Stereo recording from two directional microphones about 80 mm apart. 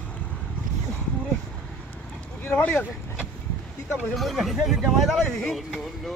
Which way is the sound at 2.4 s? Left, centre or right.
Left.